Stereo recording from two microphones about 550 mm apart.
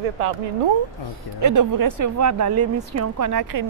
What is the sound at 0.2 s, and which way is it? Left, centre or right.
Speech, right.